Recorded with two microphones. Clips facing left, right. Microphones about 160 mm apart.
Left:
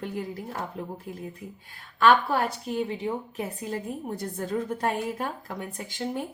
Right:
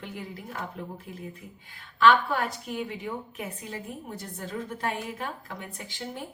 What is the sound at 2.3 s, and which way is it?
A woman's voice, 30° left (ahead or behind).